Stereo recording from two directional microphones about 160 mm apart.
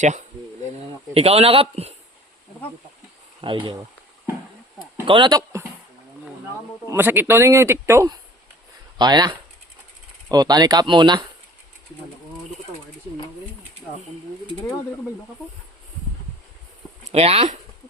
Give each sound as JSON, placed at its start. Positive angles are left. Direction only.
{"t": 0.0, "sound": "a man's voice", "side_deg": -50}
{"t": 3.4, "sound": "a man's voice", "side_deg": -30}
{"t": 5.0, "sound": "a man's voice", "side_deg": -30}
{"t": 6.9, "sound": "speech", "side_deg": -15}
{"t": 17.1, "sound": "a man's voice", "side_deg": -40}